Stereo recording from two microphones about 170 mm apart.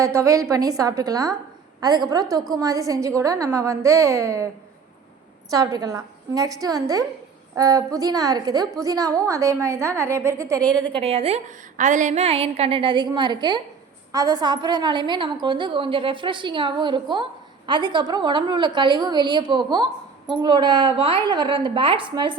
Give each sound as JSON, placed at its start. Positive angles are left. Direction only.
{"t": 0.0, "sound": "a woman's voice", "side_deg": -15}
{"t": 5.5, "sound": "a woman's voice", "side_deg": -20}